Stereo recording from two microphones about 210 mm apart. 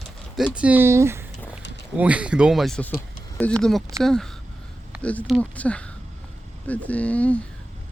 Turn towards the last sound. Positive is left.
turn(degrees=5)  # may be behind; listen again after turning